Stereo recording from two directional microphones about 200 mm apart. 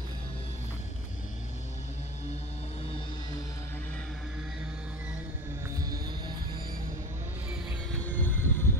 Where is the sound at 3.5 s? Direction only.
15° left (ahead or behind); by 6.6 s 20° right (ahead or behind).